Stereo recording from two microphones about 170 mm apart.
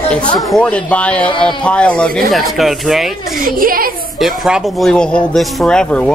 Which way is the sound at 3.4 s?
55° right (ahead or behind).